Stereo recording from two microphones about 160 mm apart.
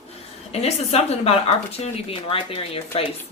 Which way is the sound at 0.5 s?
40° left (ahead or behind).